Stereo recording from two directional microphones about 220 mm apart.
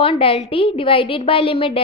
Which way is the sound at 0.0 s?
25° left (ahead or behind).